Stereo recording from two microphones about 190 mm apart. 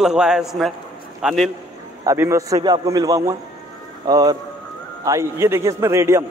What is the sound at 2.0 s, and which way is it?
A man's voice, 15° right (ahead or behind).